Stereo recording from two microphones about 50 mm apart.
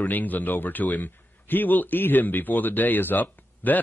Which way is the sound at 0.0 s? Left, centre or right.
Left.